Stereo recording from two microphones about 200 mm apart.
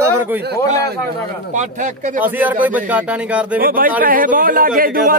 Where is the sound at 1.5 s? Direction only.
40° right (ahead or behind).